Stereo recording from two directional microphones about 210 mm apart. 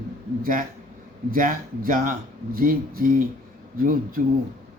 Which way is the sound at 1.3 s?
40° right (ahead or behind).